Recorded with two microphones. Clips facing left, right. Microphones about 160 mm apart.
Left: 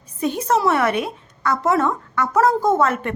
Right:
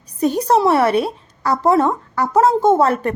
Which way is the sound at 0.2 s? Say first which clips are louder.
Right 4 dB; 40° right (ahead or behind).